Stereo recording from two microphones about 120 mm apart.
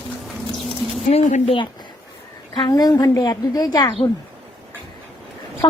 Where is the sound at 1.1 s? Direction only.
70° left (ahead or behind).